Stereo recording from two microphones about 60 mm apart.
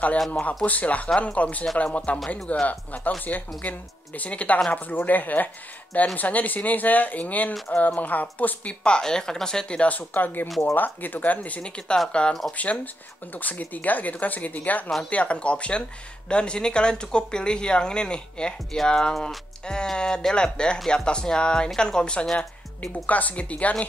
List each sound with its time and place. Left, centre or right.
0.3 s speech: left
2.1 s speech: centre
2.4 s speech: left
8.8 s speech: centre
12.5 s speech: left; by 22.5 s centre
22.8 s speech: left